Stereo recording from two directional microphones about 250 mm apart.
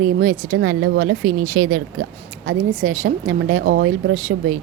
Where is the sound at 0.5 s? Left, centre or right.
Right.